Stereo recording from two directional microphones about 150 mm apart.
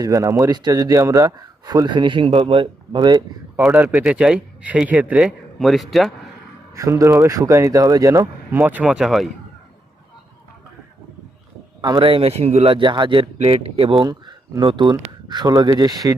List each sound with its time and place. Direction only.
0.0 s speech: 20° right (ahead or behind)
3.6 s speech: 10° right (ahead or behind)
6.7 s speech: 20° right (ahead or behind)
8.6 s speech: 10° right (ahead or behind)
11.8 s a man's voice: 30° right (ahead or behind)